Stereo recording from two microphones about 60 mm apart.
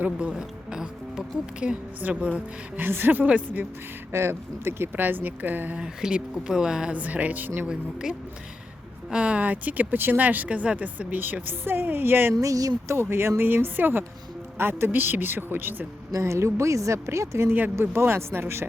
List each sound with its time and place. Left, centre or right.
0.0 s speech: right
2.0 s speech: right
2.8 s a man's voice: right
4.1 s speech: right
4.9 s a man's voice: right
5.7 s speech: centre
6.9 s speech: right
8.1 s speech: centre; by 12.3 s right
12.3 s speech: right
12.9 s a man's voice: right
16.1 s speech: right